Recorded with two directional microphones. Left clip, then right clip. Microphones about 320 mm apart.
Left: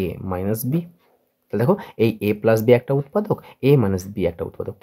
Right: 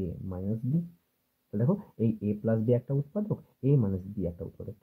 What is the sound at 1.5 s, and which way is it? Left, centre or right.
Speech, left.